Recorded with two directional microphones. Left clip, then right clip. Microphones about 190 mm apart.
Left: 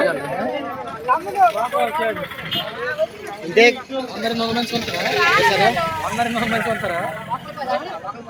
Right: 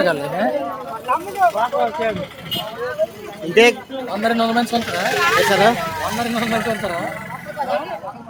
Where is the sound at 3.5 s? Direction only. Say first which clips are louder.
Right 1 dB; 20° right (ahead or behind).